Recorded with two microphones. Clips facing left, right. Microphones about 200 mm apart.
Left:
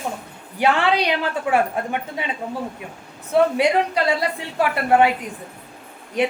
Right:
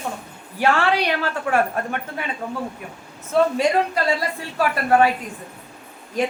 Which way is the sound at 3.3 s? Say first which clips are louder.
Left 1 dB; 15° left (ahead or behind).